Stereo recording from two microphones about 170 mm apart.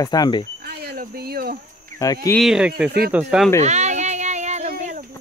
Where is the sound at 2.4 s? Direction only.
5° right (ahead or behind).